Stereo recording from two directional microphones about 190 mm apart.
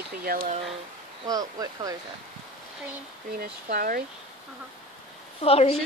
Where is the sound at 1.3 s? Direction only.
20° right (ahead or behind).